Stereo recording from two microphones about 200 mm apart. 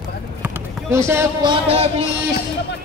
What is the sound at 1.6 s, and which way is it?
Speech, 30° right (ahead or behind).